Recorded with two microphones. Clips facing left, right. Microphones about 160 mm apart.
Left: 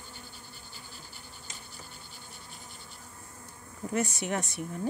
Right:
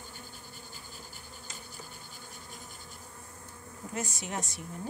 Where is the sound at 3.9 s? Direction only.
65° left (ahead or behind).